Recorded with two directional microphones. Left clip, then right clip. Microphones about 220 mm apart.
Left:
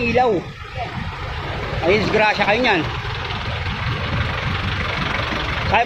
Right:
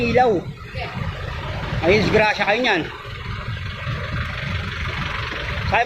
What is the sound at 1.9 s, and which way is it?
Speech, 5° right (ahead or behind).